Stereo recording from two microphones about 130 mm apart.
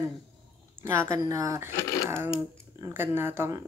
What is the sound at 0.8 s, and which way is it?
Speech, 20° right (ahead or behind).